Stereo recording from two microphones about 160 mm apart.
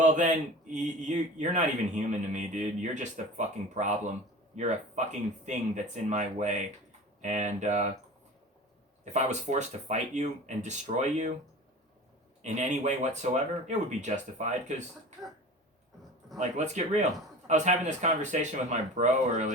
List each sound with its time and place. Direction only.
0.0 s speech: 50° right (ahead or behind)
9.1 s speech: 45° right (ahead or behind)
12.4 s speech: 45° right (ahead or behind)
16.4 s speech: 45° right (ahead or behind)